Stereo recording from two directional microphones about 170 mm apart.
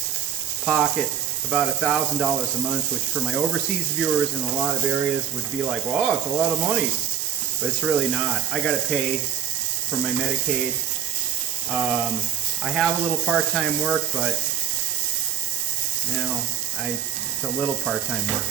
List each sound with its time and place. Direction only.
0.6 s speech: centre (ahead or behind)
3.9 s speech: centre (ahead or behind)
7.9 s speech: centre (ahead or behind)
11.7 s speech: centre (ahead or behind)